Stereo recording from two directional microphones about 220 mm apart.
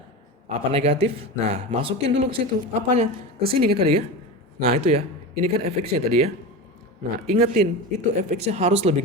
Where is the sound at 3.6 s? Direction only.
45° right (ahead or behind).